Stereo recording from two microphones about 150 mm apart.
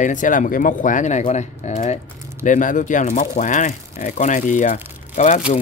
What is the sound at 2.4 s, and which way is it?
Speech, 60° left (ahead or behind).